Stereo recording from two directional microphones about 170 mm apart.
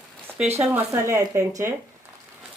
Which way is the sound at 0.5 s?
10° right (ahead or behind).